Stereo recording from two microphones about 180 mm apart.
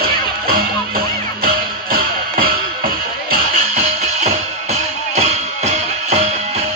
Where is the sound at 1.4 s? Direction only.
55° right (ahead or behind).